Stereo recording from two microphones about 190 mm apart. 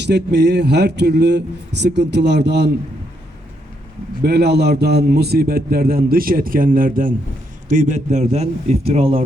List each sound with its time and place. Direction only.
0.0 s speech: 60° right (ahead or behind)
4.2 s a man's voice: 60° right (ahead or behind); by 9.2 s 30° right (ahead or behind)